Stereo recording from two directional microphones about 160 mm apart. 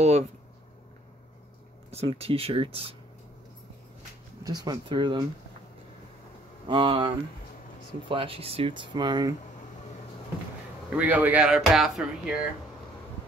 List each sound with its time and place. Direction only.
0.0 s speech: 45° right (ahead or behind)
1.9 s speech: 40° right (ahead or behind)
4.4 s speech: 25° right (ahead or behind)
6.7 s speech: 30° right (ahead or behind)
8.1 s speech: 35° right (ahead or behind)
10.9 s speech: 10° right (ahead or behind)